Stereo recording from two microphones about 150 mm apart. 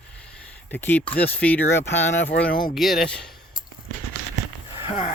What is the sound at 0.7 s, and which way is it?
Speech, 10° left (ahead or behind).